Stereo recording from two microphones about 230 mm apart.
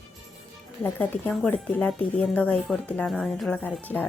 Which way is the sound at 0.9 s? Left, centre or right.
Centre.